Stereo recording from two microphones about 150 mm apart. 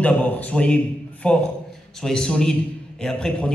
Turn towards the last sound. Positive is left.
turn(degrees=5)  # may be behind; listen again after turning